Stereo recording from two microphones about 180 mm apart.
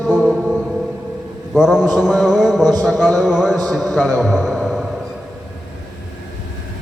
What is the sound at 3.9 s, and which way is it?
Speech, centre (ahead or behind).